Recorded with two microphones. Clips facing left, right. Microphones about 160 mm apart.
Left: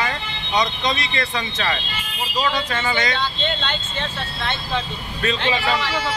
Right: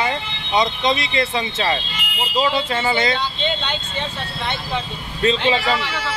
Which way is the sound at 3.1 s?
10° right (ahead or behind).